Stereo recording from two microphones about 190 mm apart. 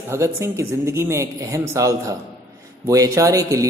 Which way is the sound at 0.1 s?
15° right (ahead or behind).